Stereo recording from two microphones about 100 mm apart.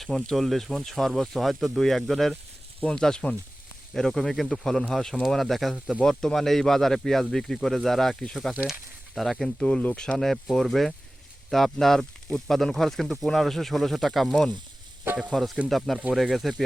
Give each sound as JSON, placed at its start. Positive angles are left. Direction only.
{"t": 0.0, "sound": "speech", "side_deg": 5}